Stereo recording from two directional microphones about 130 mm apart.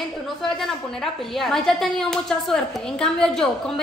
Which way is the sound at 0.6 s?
Centre (ahead or behind).